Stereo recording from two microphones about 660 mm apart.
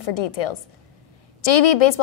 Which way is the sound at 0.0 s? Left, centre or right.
Left.